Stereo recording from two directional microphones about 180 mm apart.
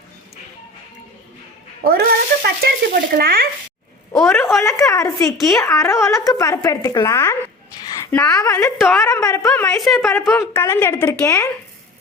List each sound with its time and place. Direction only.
1.8 s speech: 60° right (ahead or behind)
4.1 s a woman's voice: centre (ahead or behind)
4.6 s a woman's voice: 15° left (ahead or behind)
8.8 s a woman's voice: centre (ahead or behind)
9.0 s speech: 15° left (ahead or behind)
9.5 s a woman's voice: 5° left (ahead or behind)